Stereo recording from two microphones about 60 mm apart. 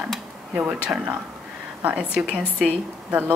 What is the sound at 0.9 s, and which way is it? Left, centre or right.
Speech, right.